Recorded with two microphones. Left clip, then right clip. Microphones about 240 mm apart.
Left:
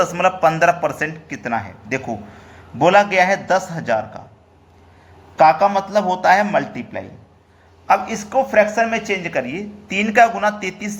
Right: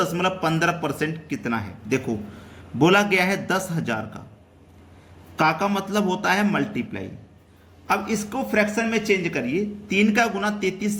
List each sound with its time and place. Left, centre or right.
0.0 s speech: centre
5.4 s speech: centre
7.9 s speech: centre